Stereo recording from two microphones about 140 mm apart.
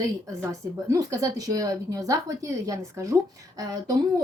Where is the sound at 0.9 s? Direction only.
25° right (ahead or behind).